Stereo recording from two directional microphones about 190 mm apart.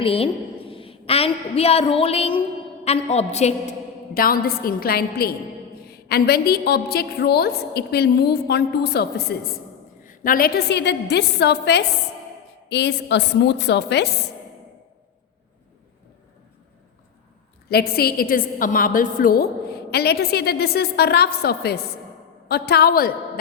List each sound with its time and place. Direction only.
0.0 s a woman's voice: 30° left (ahead or behind)
4.1 s a woman's voice: 50° left (ahead or behind)
10.0 s a woman's voice: 45° left (ahead or behind); by 14.1 s 65° left (ahead or behind)
17.7 s a woman's voice: 55° left (ahead or behind)